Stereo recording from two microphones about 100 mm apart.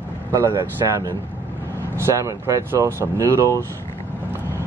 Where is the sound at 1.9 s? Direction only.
30° right (ahead or behind).